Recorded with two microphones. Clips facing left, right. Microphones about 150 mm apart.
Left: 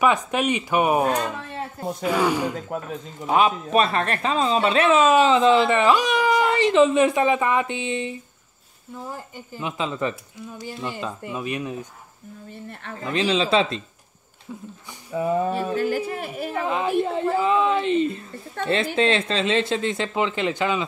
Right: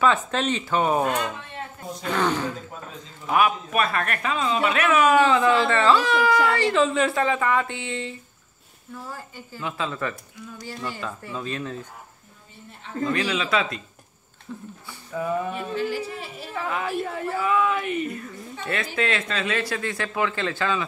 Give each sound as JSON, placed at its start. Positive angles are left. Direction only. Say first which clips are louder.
{"t": 0.0, "sound": "speech", "louder": "left 1 dB", "side_deg": 15}
{"t": 1.0, "sound": "speech", "louder": "left 2 dB", "side_deg": 35}
{"t": 2.0, "sound": "speech", "louder": "left 2 dB", "side_deg": 10}
{"t": 3.3, "sound": "a woman's voice", "louder": "left 2 dB", "side_deg": 25}
{"t": 13.0, "sound": "a woman's voice", "louder": "left 3 dB", "side_deg": 20}
{"t": 14.5, "sound": "speech", "louder": "even", "side_deg": 15}
{"t": 15.1, "sound": "speech", "louder": "left 4 dB", "side_deg": 30}
{"t": 16.5, "sound": "a woman's voice", "louder": "left 4 dB", "side_deg": 20}
{"t": 18.6, "sound": "speech", "louder": "left 8 dB", "side_deg": 55}
{"t": 18.9, "sound": "a woman's voice", "louder": "left 3 dB", "side_deg": 25}